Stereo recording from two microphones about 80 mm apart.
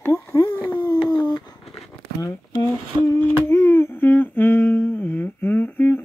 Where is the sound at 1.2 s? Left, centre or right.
Left.